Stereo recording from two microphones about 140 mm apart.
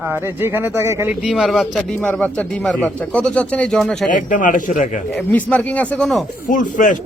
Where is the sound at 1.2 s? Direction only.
Centre (ahead or behind).